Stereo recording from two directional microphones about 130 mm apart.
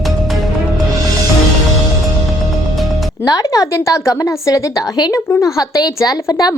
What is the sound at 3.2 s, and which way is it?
A woman's voice, 30° left (ahead or behind).